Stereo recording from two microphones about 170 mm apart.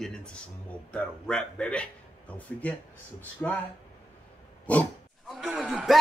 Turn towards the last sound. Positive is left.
turn(degrees=0)  # may be behind; listen again after turning